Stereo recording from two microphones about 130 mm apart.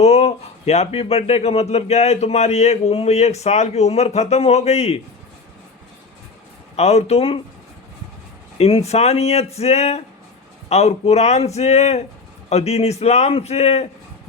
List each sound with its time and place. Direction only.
0.0 s speech: 55° left (ahead or behind)
6.7 s speech: 55° left (ahead or behind)
8.5 s speech: 50° left (ahead or behind)